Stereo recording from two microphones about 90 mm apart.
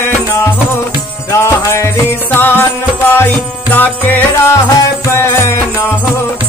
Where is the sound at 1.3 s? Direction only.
30° left (ahead or behind).